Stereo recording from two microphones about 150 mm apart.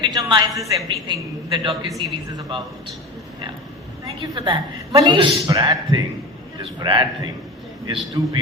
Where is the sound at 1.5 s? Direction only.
30° right (ahead or behind).